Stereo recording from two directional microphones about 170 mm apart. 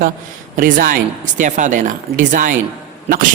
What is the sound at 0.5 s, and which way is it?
A man's voice, 50° right (ahead or behind).